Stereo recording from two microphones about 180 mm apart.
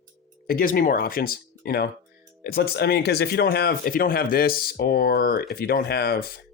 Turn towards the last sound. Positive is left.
turn(degrees=60)  # may be behind; listen again after turning